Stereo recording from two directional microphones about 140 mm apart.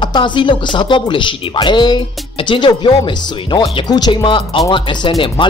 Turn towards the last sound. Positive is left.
turn(degrees=40)  # may be behind; listen again after turning